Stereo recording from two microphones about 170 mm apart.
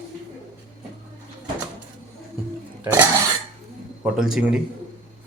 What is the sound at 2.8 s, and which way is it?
A man's voice, 15° right (ahead or behind).